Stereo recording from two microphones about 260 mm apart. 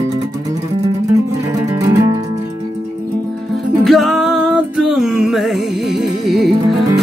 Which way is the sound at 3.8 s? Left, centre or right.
Centre.